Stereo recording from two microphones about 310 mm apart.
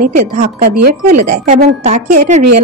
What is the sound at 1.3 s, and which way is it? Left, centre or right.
A woman's voice, right.